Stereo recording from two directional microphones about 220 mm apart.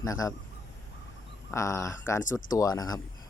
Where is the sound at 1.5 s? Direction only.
15° left (ahead or behind).